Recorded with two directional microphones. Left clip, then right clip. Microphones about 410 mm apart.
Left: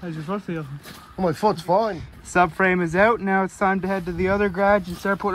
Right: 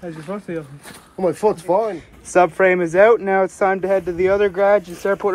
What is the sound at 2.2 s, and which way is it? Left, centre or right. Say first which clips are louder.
Speech: right 5 dB; centre.